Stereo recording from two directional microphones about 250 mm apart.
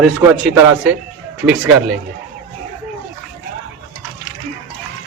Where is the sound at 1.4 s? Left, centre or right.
Centre.